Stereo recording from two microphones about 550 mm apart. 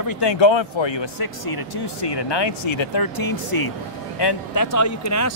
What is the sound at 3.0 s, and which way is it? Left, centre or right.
Speech, left.